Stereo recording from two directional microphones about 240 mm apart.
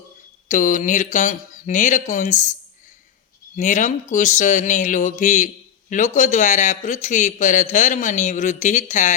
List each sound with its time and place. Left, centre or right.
0.4 s a man's voice: left